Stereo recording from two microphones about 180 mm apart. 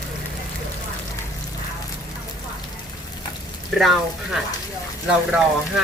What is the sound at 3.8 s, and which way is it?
Speech, centre (ahead or behind).